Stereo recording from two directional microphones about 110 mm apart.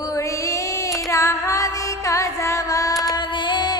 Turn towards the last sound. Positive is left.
turn(degrees=40)  # may be behind; listen again after turning